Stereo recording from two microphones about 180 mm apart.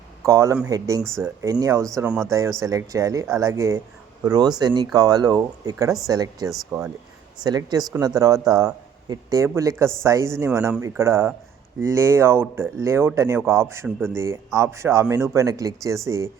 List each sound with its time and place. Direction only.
0.3 s a man's voice: 15° right (ahead or behind)
2.0 s speech: centre (ahead or behind)
2.6 s a man's voice: 20° right (ahead or behind)
7.4 s a man's voice: 20° right (ahead or behind)